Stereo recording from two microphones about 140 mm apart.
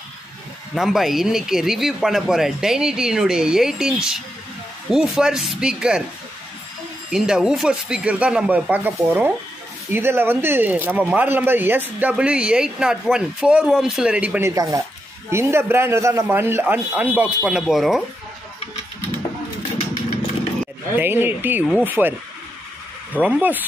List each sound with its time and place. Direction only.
0.7 s speech: centre (ahead or behind)
7.1 s speech: 5° right (ahead or behind)
14.5 s speech: 25° right (ahead or behind); by 18.0 s centre (ahead or behind)
20.9 s speech: 15° right (ahead or behind)
23.2 s speech: 10° right (ahead or behind)